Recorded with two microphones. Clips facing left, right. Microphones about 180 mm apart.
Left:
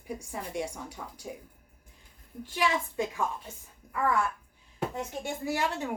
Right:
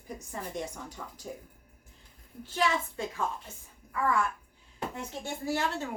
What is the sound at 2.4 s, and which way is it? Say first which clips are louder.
Speech: even; 15° left (ahead or behind).